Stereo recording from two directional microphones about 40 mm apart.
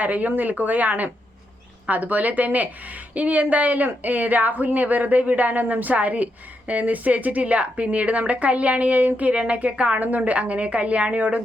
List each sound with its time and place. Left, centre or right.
0.0 s a woman's voice: right